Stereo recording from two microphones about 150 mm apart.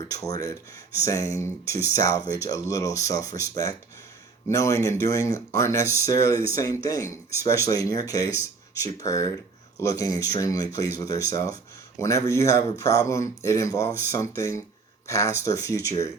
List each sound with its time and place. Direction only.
0.1 s speech: 25° left (ahead or behind)